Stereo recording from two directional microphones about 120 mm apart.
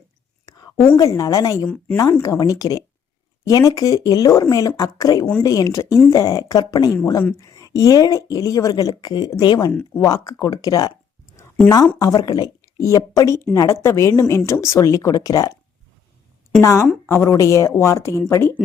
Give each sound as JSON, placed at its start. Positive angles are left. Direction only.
{"t": 0.9, "sound": "a woman's voice", "side_deg": 30}
{"t": 1.6, "sound": "speech", "side_deg": 10}
{"t": 2.0, "sound": "a woman's voice", "side_deg": 30}
{"t": 11.9, "sound": "a woman's voice", "side_deg": 30}
{"t": 16.6, "sound": "a woman's voice", "side_deg": 25}